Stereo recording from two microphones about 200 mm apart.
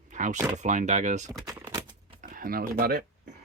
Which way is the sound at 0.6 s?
35° right (ahead or behind).